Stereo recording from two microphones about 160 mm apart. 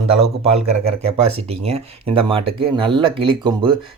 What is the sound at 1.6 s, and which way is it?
Speech, 35° right (ahead or behind).